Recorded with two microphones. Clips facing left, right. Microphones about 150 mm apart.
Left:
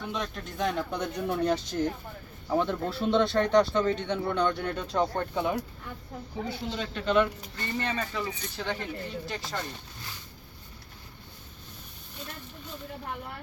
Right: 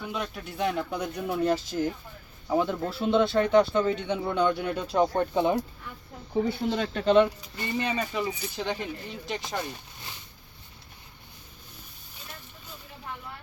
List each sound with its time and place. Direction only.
0.0 s speech: 5° right (ahead or behind); by 5.6 s 25° right (ahead or behind)
6.7 s speech: 50° right (ahead or behind)
7.0 s speech: 30° right (ahead or behind)
7.5 s speech: 10° right (ahead or behind)